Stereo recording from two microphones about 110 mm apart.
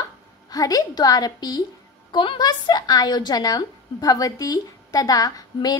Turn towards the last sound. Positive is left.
turn(degrees=35)  # may be behind; listen again after turning